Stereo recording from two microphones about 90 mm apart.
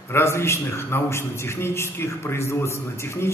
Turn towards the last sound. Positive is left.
turn(degrees=30)  # may be behind; listen again after turning